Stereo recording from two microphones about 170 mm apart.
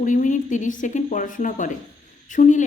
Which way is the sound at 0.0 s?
50° left (ahead or behind).